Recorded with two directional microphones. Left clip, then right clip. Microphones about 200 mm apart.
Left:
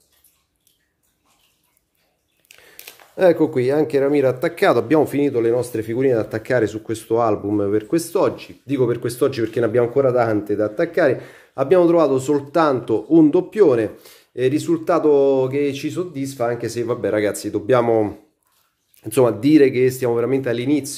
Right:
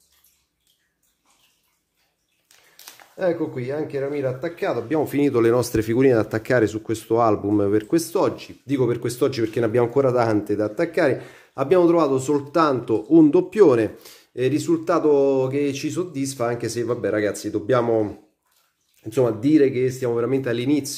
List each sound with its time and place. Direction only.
3.2 s speech: 55° left (ahead or behind)
5.3 s speech: 25° right (ahead or behind); by 20.9 s 5° left (ahead or behind)